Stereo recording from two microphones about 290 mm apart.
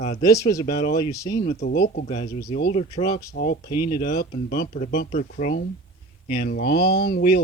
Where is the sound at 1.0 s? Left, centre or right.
Centre.